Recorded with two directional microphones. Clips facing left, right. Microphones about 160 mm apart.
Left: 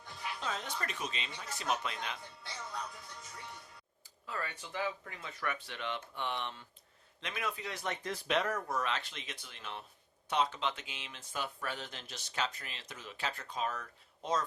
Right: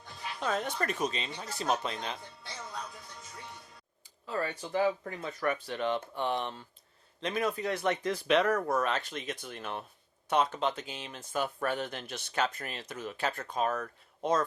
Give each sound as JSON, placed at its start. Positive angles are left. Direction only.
{"t": 0.3, "sound": "speech", "side_deg": -55}
{"t": 4.3, "sound": "speech", "side_deg": -35}